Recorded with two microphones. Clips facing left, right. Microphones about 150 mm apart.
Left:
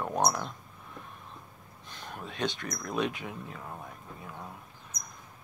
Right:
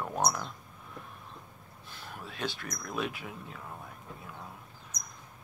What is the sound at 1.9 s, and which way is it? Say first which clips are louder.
Speech: left 3 dB; 5° right (ahead or behind).